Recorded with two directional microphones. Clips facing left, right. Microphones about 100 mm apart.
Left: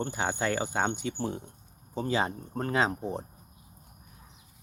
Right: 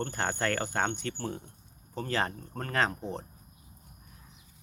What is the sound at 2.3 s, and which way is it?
Speech, 25° left (ahead or behind).